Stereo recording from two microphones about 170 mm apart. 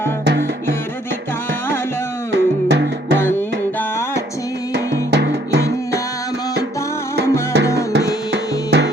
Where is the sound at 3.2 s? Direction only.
10° left (ahead or behind).